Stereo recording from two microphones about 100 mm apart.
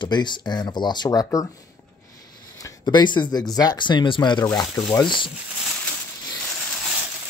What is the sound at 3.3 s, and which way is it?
Speech, 40° left (ahead or behind).